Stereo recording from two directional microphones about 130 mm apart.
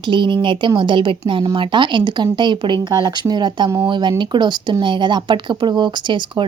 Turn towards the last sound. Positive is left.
turn(degrees=-35)  # may be behind; listen again after turning